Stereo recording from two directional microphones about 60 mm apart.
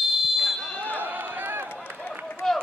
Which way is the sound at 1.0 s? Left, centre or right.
Right.